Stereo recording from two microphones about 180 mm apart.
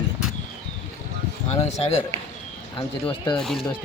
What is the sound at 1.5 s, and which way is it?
Speech, 35° left (ahead or behind).